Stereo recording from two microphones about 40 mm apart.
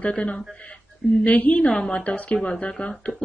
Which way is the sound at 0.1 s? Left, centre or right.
Left.